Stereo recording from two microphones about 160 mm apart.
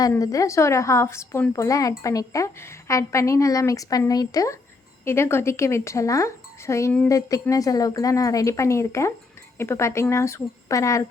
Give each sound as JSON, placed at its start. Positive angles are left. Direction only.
{"t": 0.1, "sound": "a woman's voice", "side_deg": 20}